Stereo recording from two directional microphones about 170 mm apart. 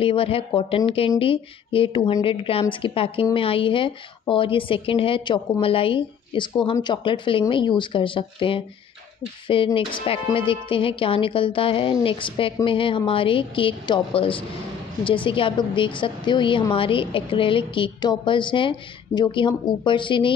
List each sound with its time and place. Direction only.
0.0 s a woman's voice: 35° left (ahead or behind)
9.8 s a woman's voice: 35° left (ahead or behind)